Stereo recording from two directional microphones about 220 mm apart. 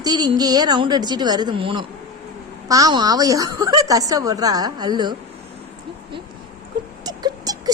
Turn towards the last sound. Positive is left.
turn(degrees=-15)  # may be behind; listen again after turning